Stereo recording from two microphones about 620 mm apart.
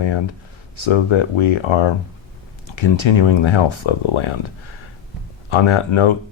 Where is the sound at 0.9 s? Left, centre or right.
Left.